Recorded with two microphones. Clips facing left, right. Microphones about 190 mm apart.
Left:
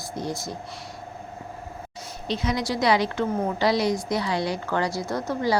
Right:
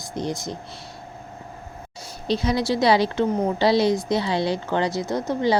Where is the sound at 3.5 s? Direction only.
30° right (ahead or behind).